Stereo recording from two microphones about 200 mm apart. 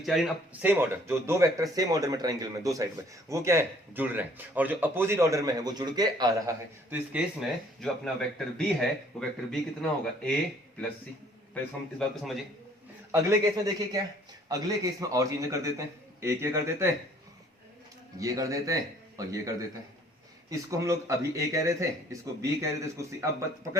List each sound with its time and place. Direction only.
0.0 s speech: centre (ahead or behind); by 6.5 s 20° right (ahead or behind)
6.9 s a man's voice: 5° right (ahead or behind)
11.5 s a man's voice: centre (ahead or behind)
13.1 s a man's voice: 15° right (ahead or behind)
15.1 s speech: 15° right (ahead or behind)
18.2 s speech: 15° right (ahead or behind)